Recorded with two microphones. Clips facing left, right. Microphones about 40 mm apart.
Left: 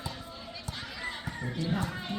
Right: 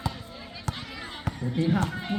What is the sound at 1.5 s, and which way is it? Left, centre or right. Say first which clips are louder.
Speech: right 8 dB; right.